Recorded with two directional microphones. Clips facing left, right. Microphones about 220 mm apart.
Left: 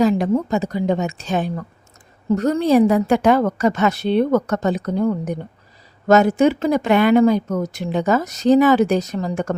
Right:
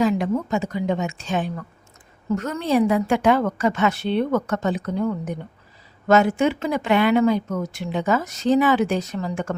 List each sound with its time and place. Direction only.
0.0 s speech: 35° left (ahead or behind)